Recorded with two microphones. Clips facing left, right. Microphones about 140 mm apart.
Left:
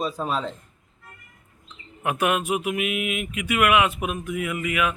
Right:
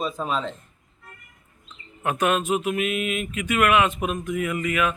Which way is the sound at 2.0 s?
10° left (ahead or behind).